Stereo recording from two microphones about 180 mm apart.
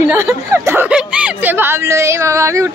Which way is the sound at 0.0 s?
15° right (ahead or behind).